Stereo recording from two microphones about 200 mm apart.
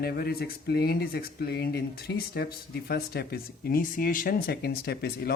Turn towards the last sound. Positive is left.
turn(degrees=50)  # may be behind; listen again after turning